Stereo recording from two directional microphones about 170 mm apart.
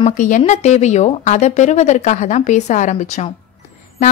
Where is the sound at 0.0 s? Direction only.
45° left (ahead or behind).